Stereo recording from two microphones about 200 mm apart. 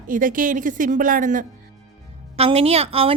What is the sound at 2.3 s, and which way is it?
Speech, 30° right (ahead or behind).